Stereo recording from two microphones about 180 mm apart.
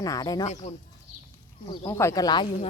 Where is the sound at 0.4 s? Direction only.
40° left (ahead or behind).